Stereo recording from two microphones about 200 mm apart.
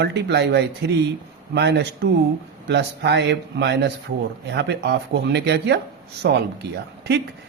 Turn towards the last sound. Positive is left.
turn(degrees=-55)  # may be behind; listen again after turning